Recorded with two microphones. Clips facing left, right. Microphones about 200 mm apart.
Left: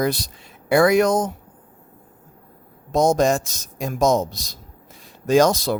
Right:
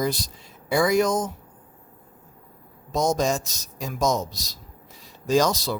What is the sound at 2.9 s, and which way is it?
Speech, 55° left (ahead or behind).